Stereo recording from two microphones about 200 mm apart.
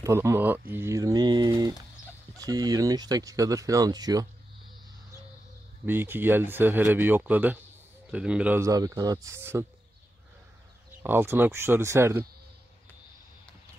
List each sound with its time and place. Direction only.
0.0 s speech: 15° right (ahead or behind)
5.9 s speech: 10° right (ahead or behind)
11.0 s speech: 10° right (ahead or behind)